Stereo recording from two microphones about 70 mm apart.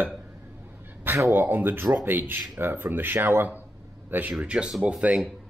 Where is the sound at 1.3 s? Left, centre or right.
Right.